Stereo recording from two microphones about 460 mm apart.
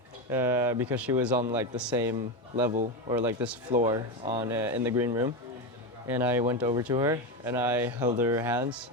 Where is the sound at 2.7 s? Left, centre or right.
Centre.